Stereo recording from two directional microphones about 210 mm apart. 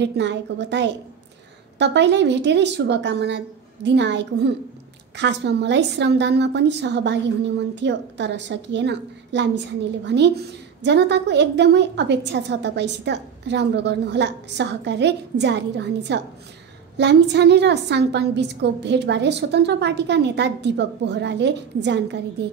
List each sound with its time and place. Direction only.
0.0 s a woman's voice: 55° right (ahead or behind)